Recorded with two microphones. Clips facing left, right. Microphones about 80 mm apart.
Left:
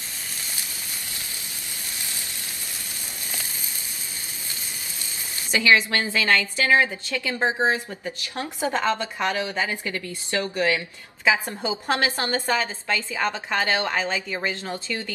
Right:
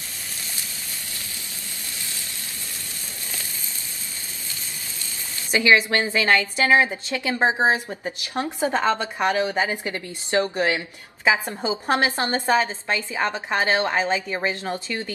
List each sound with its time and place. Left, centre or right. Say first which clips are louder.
5.5 s a woman's voice: right 2 dB; right